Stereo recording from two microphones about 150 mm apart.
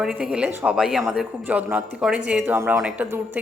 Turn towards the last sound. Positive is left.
turn(degrees=-10)  # may be behind; listen again after turning